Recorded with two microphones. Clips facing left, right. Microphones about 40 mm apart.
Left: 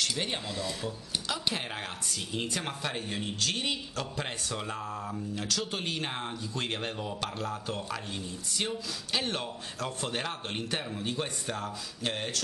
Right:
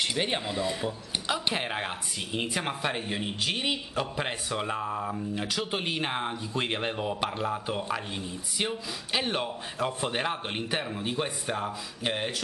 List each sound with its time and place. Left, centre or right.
0.0 s speech: right